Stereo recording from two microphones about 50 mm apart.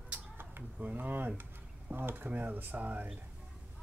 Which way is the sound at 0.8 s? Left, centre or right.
Right.